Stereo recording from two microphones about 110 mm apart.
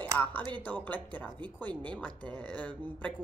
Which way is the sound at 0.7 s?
15° left (ahead or behind).